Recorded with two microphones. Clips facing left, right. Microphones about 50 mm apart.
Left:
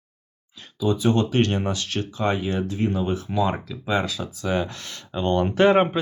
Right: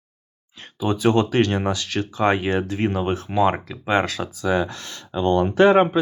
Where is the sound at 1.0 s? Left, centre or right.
Right.